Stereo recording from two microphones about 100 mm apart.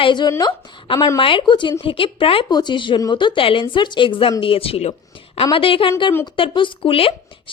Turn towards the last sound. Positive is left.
turn(degrees=65)  # may be behind; listen again after turning